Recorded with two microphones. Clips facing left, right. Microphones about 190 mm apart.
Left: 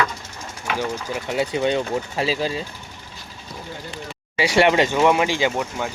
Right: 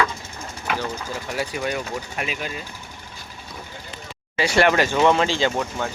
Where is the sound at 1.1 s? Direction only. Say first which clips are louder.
Left 7 dB; 25° left (ahead or behind).